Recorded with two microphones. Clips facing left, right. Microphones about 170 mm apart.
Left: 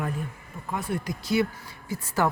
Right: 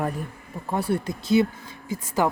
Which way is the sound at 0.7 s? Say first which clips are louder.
Right 5 dB; 35° right (ahead or behind).